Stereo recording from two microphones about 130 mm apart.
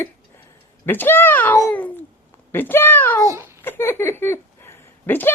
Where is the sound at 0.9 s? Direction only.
15° left (ahead or behind).